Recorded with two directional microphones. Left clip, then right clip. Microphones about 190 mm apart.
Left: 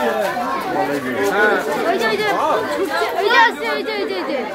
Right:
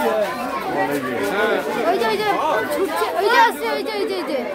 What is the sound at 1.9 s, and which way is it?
Speech, 20° right (ahead or behind).